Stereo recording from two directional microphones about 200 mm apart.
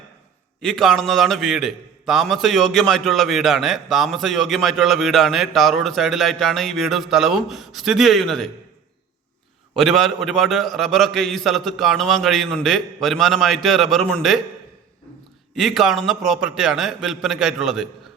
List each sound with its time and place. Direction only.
0.6 s a man's voice: centre (ahead or behind)
9.7 s a man's voice: centre (ahead or behind)
15.5 s a man's voice: centre (ahead or behind)